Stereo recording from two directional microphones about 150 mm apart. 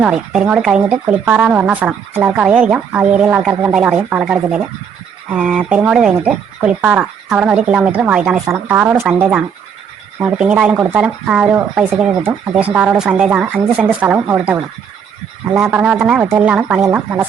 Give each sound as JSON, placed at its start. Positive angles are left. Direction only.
{"t": 0.0, "sound": "speech", "side_deg": -5}
{"t": 16.2, "sound": "speech", "side_deg": -20}